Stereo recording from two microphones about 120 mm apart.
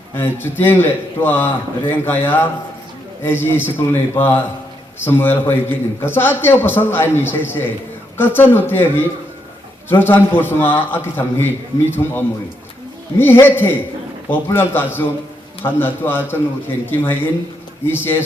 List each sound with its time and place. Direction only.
0.2 s a man's voice: 20° left (ahead or behind)